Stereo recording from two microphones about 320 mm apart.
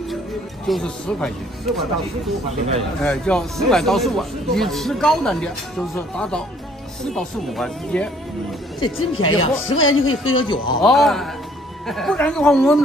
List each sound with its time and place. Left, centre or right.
0.7 s speech: centre
3.0 s speech: centre
8.7 s speech: centre
9.7 s speech: left
10.3 s speech: centre
10.8 s speech: centre